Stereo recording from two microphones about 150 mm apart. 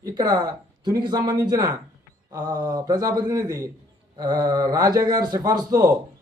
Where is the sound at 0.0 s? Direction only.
25° right (ahead or behind).